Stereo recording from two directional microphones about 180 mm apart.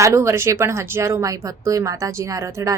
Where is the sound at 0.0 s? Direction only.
15° right (ahead or behind).